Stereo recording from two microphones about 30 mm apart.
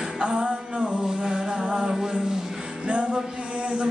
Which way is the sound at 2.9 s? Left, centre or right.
Right.